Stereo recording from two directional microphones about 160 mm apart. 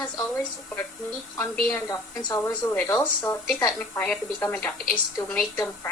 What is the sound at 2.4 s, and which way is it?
A woman's voice, 10° left (ahead or behind).